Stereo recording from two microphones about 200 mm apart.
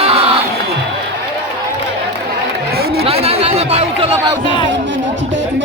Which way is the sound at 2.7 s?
50° right (ahead or behind).